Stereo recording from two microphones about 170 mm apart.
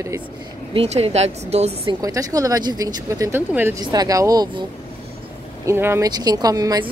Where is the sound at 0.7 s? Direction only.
35° right (ahead or behind).